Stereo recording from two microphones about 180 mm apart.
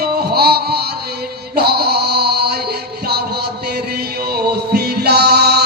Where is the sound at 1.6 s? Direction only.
60° right (ahead or behind).